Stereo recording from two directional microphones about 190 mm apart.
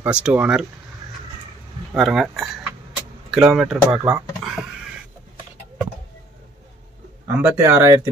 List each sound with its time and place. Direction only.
0.0 s speech: 10° right (ahead or behind)
2.0 s speech: centre (ahead or behind)
7.3 s speech: 10° right (ahead or behind)